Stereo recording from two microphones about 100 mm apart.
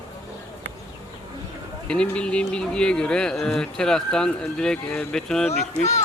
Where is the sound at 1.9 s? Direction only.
10° left (ahead or behind).